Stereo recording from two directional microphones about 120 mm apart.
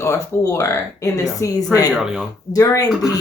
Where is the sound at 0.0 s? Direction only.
25° left (ahead or behind).